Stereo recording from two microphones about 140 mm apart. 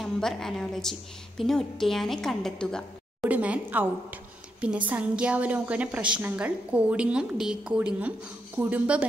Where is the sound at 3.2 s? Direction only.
10° right (ahead or behind).